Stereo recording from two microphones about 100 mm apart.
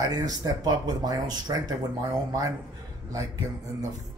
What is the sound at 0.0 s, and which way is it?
A man's voice, 40° right (ahead or behind).